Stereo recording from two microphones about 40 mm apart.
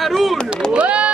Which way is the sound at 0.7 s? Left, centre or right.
Right.